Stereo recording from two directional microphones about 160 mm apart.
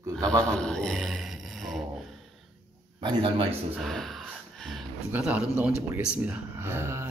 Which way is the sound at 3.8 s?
Centre (ahead or behind).